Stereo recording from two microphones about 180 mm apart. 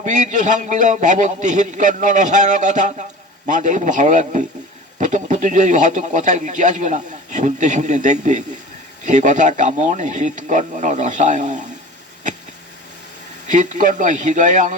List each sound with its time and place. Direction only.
0.0 s a man's voice: 45° right (ahead or behind)
13.5 s a man's voice: 45° right (ahead or behind)